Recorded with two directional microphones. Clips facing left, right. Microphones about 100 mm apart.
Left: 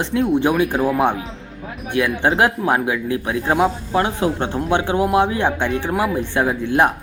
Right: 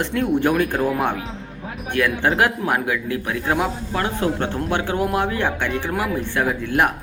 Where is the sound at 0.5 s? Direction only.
10° left (ahead or behind).